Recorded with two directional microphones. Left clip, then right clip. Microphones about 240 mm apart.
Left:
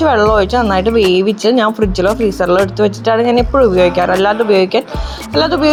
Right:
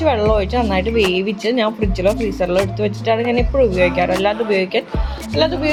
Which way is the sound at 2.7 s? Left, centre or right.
Centre.